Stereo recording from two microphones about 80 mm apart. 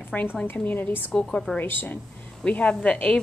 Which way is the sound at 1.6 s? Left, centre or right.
Left.